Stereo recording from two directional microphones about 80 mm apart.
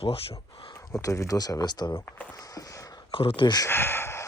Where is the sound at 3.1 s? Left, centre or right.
Left.